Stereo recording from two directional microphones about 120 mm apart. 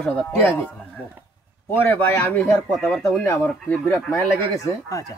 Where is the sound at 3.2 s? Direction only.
15° left (ahead or behind).